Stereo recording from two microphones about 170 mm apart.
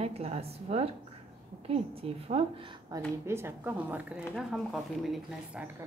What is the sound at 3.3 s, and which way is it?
A woman's voice, 15° right (ahead or behind).